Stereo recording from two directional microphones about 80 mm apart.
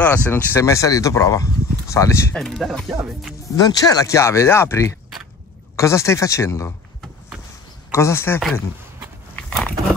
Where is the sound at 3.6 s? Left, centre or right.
Left.